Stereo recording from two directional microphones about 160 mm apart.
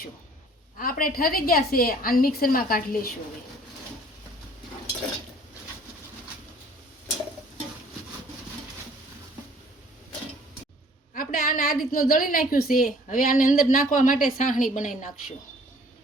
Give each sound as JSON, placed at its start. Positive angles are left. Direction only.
{"t": 0.8, "sound": "a woman's voice", "side_deg": 60}
{"t": 11.1, "sound": "a woman's voice", "side_deg": 60}